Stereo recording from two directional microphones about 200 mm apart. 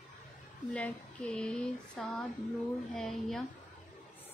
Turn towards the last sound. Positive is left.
turn(degrees=0)  # may be behind; listen again after turning